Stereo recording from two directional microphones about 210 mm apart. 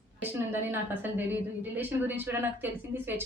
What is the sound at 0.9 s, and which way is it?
A woman's voice, 10° right (ahead or behind).